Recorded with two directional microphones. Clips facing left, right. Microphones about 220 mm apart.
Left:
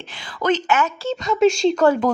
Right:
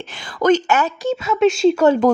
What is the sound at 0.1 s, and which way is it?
Speech, 50° right (ahead or behind).